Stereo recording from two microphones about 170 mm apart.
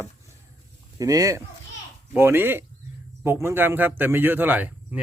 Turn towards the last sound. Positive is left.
turn(degrees=-10)  # may be behind; listen again after turning